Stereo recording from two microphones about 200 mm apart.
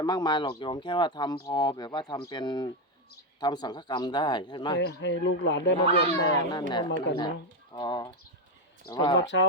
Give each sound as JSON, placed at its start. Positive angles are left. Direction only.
{"t": 0.0, "sound": "speech", "side_deg": 20}
{"t": 4.8, "sound": "speech", "side_deg": 60}
{"t": 6.2, "sound": "speech", "side_deg": 20}
{"t": 9.2, "sound": "speech", "side_deg": 65}